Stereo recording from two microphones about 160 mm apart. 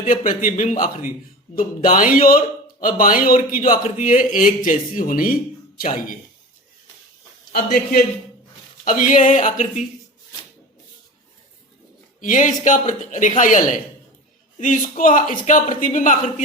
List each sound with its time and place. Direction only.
0.0 s a man's voice: 55° left (ahead or behind)
7.5 s a man's voice: 70° left (ahead or behind)
8.8 s a man's voice: 55° left (ahead or behind)
12.2 s a man's voice: 55° left (ahead or behind)